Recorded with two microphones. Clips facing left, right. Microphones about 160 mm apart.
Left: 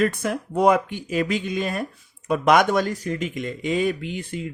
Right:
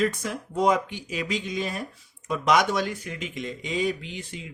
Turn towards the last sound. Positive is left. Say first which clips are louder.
# left 8 dB
turn(degrees=50)  # may be behind; listen again after turning